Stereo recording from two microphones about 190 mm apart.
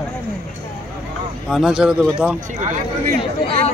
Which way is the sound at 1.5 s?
5° right (ahead or behind).